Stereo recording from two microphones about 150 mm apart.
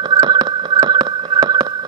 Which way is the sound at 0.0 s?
30° right (ahead or behind).